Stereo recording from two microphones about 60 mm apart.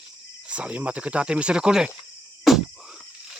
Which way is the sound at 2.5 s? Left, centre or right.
Centre.